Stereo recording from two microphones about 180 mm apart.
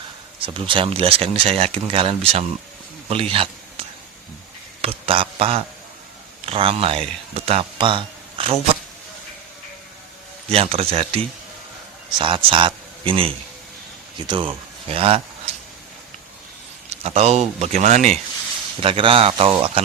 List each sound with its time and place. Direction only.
0.3 s speech: 30° right (ahead or behind)
3.3 s a sound: 30° right (ahead or behind)
4.8 s speech: 30° right (ahead or behind)
10.5 s speech: 35° right (ahead or behind)
12.2 s speech: 30° right (ahead or behind)
16.9 s speech: 35° right (ahead or behind)
18.8 s speech: 30° right (ahead or behind)